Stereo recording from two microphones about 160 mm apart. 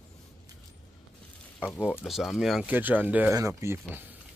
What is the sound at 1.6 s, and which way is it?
Speech, 10° right (ahead or behind).